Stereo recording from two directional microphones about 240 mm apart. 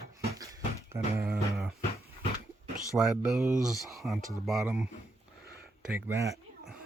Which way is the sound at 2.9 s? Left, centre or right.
Centre.